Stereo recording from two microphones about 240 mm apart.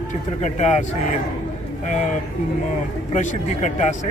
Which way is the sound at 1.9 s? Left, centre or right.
Left.